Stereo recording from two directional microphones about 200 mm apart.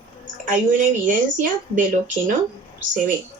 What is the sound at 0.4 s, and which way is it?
Speech, 40° right (ahead or behind).